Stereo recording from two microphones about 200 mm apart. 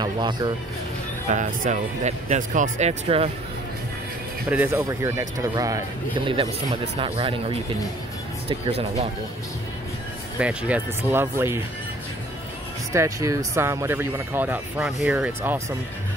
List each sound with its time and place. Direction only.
0.0 s speech: 20° right (ahead or behind)
1.3 s speech: 40° right (ahead or behind)
4.5 s speech: 10° right (ahead or behind)
6.2 s speech: 30° right (ahead or behind)
10.4 s speech: 10° right (ahead or behind)
12.9 s speech: 15° right (ahead or behind)